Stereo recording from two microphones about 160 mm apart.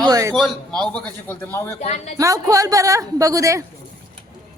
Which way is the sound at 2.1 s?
20° right (ahead or behind).